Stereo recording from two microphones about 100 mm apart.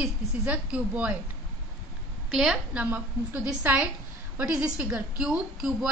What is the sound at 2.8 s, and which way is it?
A woman's voice, 15° right (ahead or behind).